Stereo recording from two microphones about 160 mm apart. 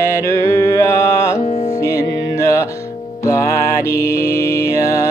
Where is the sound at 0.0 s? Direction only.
15° left (ahead or behind).